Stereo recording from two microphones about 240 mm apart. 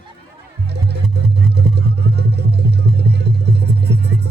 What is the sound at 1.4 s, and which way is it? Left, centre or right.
Music, right.